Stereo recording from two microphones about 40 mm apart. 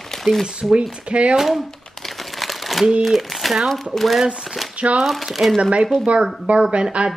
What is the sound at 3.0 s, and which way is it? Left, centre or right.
Speech, centre.